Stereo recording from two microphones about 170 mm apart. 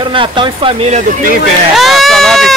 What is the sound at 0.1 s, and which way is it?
Speech, 30° right (ahead or behind).